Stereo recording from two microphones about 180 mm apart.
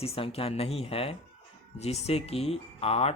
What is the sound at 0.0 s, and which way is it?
Speech, 35° left (ahead or behind).